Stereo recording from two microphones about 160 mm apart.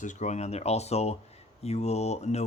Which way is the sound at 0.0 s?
50° left (ahead or behind).